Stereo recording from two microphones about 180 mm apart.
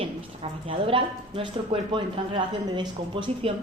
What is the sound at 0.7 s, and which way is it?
Speech, 30° right (ahead or behind).